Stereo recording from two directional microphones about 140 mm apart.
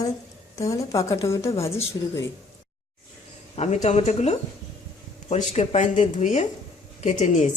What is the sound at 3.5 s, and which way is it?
Speech, 50° left (ahead or behind).